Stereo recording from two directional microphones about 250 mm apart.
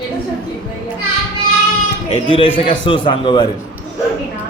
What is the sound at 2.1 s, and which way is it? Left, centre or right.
Speech, left.